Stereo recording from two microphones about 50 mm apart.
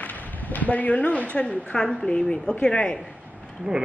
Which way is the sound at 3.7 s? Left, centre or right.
Right.